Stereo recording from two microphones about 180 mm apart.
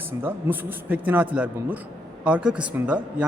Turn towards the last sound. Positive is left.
turn(degrees=-5)  # may be behind; listen again after turning